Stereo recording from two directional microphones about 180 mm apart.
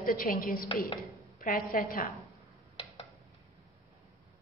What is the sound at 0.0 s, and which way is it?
A woman's voice, 50° left (ahead or behind).